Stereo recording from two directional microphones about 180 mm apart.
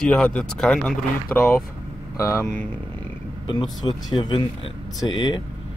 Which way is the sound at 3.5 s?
30° left (ahead or behind).